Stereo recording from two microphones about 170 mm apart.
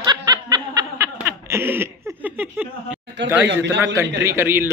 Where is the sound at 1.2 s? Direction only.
15° right (ahead or behind).